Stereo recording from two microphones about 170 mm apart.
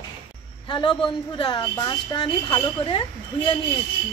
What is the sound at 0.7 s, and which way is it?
A woman's voice, 30° left (ahead or behind).